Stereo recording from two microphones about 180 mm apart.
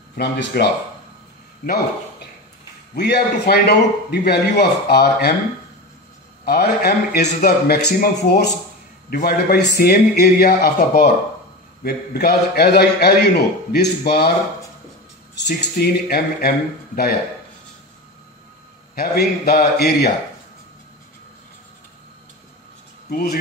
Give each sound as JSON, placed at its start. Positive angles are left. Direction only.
{"t": 0.2, "sound": "speech", "side_deg": 70}
{"t": 2.9, "sound": "a man's voice", "side_deg": 65}
{"t": 6.4, "sound": "a man's voice", "side_deg": 60}
{"t": 15.3, "sound": "a man's voice", "side_deg": 65}
{"t": 18.9, "sound": "a man's voice", "side_deg": 60}
{"t": 23.0, "sound": "speech", "side_deg": 60}